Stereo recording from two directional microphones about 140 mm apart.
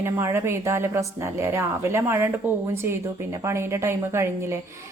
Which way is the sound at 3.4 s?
20° right (ahead or behind).